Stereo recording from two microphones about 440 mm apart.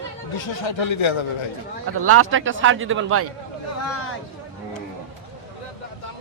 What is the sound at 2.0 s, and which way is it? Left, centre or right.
Speech, right.